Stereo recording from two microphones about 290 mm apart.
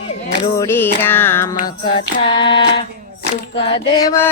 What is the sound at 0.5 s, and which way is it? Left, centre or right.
Music, centre.